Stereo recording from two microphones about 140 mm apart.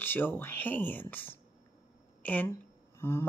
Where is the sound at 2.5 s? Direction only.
15° left (ahead or behind).